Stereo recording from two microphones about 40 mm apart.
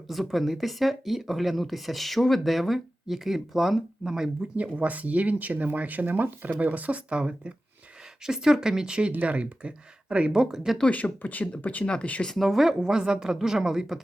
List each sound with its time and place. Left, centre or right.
0.1 s speech: centre
4.5 s speech: right
7.1 s speech: right
8.2 s speech: centre
10.3 s speech: centre
10.8 s speech: left
12.3 s speech: centre
12.8 s speech: centre